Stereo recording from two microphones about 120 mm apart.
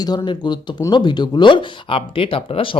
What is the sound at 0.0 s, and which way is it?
Speech, 35° left (ahead or behind).